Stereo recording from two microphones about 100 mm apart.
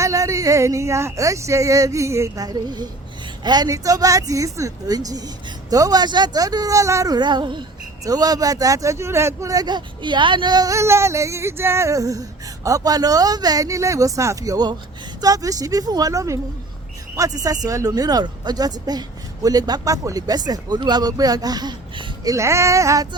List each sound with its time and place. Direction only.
0.0 s speech: 30° right (ahead or behind)
7.2 s music: 50° right (ahead or behind)
8.0 s speech: 40° right (ahead or behind)
22.2 s speech: 35° right (ahead or behind)